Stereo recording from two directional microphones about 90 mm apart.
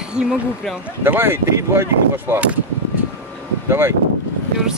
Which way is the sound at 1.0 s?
25° right (ahead or behind).